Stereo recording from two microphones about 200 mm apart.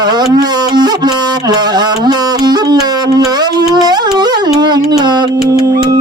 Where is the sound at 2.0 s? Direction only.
20° right (ahead or behind).